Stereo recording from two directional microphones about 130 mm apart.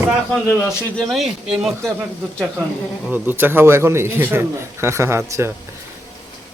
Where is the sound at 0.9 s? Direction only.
Centre (ahead or behind).